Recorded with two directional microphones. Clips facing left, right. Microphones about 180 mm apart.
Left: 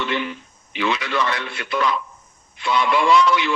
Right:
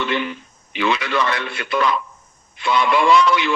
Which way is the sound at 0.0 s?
65° right (ahead or behind).